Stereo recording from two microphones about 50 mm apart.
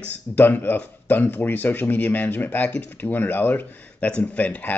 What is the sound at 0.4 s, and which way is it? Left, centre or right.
Speech, left.